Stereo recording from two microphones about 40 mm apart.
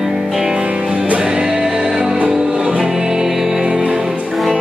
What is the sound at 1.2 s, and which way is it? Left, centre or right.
Music, right.